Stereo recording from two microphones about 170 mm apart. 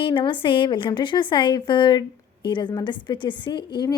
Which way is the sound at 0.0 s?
30° left (ahead or behind).